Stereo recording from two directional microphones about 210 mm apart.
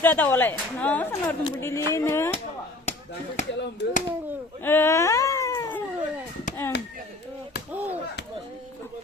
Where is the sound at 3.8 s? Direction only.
55° left (ahead or behind).